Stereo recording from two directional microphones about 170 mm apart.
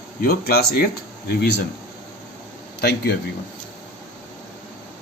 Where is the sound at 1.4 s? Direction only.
75° left (ahead or behind).